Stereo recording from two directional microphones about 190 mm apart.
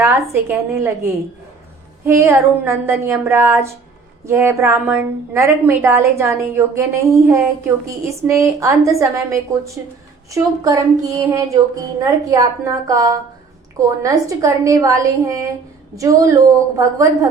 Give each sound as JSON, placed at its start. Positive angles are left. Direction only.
{"t": 0.0, "sound": "a woman's voice", "side_deg": -15}
{"t": 2.0, "sound": "a woman's voice", "side_deg": -15}